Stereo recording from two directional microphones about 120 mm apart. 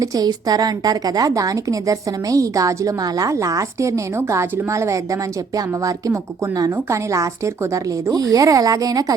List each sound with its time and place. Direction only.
0.0 s a woman's voice: 30° right (ahead or behind)